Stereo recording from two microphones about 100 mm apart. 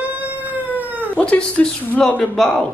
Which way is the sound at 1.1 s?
10° left (ahead or behind).